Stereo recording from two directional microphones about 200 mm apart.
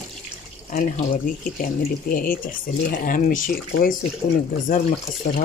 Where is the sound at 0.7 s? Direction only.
45° left (ahead or behind).